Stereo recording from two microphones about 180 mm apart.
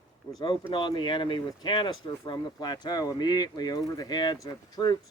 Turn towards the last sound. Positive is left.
turn(degrees=20)  # may be behind; listen again after turning